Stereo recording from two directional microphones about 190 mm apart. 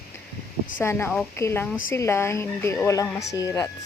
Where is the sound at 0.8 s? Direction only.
10° left (ahead or behind).